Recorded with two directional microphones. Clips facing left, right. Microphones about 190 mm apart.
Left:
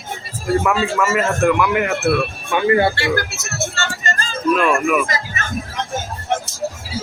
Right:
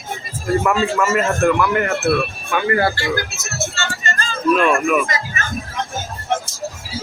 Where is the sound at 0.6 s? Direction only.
Centre (ahead or behind).